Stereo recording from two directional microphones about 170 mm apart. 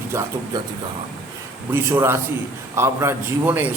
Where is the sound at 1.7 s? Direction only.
15° right (ahead or behind).